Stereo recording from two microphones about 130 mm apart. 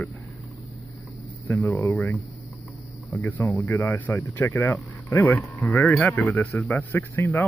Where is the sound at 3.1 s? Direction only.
15° left (ahead or behind).